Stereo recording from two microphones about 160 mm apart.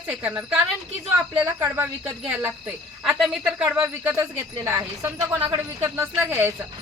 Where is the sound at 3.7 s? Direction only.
15° right (ahead or behind).